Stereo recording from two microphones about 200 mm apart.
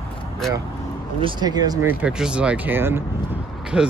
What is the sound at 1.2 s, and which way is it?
Speech, 20° right (ahead or behind).